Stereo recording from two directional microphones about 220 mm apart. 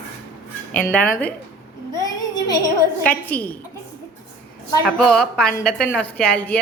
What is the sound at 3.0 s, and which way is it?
Speech, 5° left (ahead or behind).